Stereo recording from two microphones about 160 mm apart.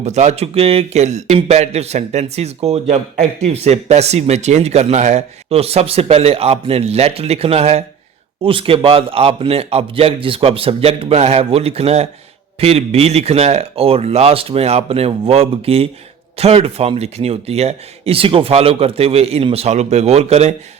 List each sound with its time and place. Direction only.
0.0 s speech: 45° right (ahead or behind)